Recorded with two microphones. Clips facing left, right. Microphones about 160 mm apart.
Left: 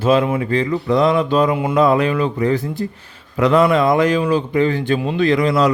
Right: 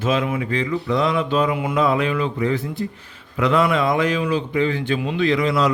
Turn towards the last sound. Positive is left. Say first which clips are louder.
# left 4 dB
turn(degrees=45)  # may be behind; listen again after turning